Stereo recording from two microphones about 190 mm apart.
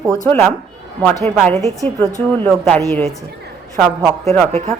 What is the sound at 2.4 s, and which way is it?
Speech, 5° left (ahead or behind).